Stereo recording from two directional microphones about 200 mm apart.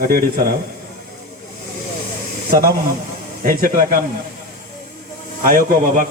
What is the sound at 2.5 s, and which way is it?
A man's voice, 50° right (ahead or behind).